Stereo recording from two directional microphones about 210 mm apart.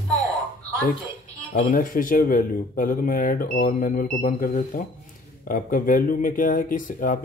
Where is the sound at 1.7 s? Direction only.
40° left (ahead or behind).